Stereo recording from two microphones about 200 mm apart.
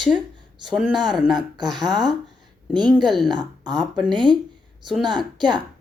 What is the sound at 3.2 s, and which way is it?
Speech, 20° right (ahead or behind).